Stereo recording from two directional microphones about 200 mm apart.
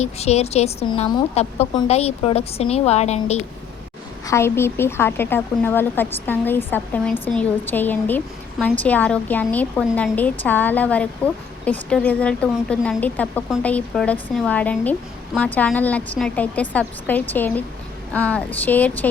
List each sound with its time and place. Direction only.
0.0 s a woman's voice: 35° left (ahead or behind)
4.3 s a woman's voice: 10° left (ahead or behind)